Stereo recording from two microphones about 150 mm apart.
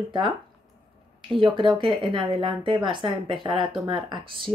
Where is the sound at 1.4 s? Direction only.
35° right (ahead or behind).